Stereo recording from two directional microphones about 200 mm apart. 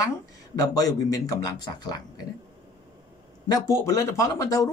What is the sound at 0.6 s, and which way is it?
Speech, 20° left (ahead or behind).